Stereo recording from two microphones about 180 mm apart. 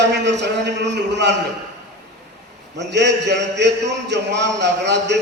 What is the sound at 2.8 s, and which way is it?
A man's voice, 75° right (ahead or behind).